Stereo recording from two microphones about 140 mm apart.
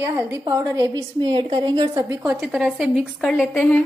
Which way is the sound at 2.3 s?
Centre (ahead or behind).